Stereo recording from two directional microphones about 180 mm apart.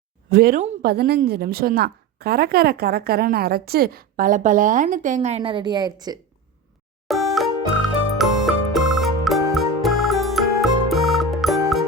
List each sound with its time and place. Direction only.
0.3 s a woman's voice: 60° right (ahead or behind); by 6.1 s 20° right (ahead or behind)
7.1 s music: centre (ahead or behind)